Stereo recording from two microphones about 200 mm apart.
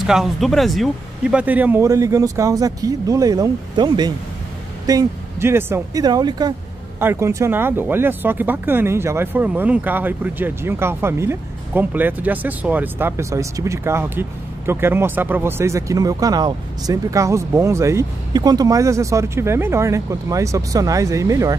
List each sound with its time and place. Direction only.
0.0 s speech: centre (ahead or behind)